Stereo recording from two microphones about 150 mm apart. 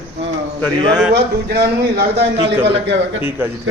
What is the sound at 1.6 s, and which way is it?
Speech, 90° right.